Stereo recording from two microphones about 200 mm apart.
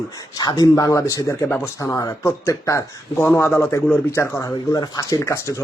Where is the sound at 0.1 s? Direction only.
20° left (ahead or behind).